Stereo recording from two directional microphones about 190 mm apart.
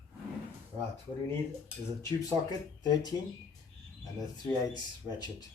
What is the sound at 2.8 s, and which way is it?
Speech, 20° left (ahead or behind).